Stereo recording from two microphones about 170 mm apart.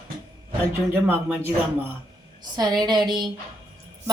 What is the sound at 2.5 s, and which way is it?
Speech, 25° right (ahead or behind).